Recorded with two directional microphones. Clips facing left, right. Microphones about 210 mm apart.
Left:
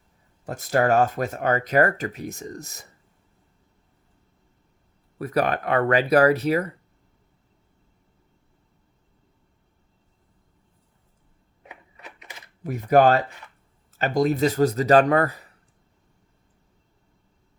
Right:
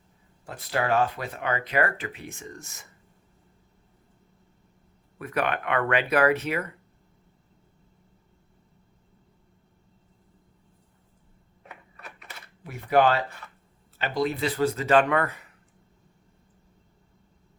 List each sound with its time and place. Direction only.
0.4 s speech: 45° left (ahead or behind)
5.1 s speech: 35° left (ahead or behind)
11.6 s typewriter: 15° left (ahead or behind)
12.6 s speech: 45° left (ahead or behind)